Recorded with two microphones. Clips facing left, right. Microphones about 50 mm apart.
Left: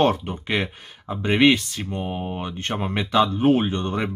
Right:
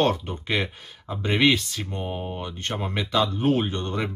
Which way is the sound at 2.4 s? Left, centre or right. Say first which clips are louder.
Left 3 dB; left.